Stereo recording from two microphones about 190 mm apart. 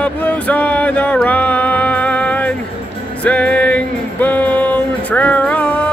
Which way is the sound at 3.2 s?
5° left (ahead or behind).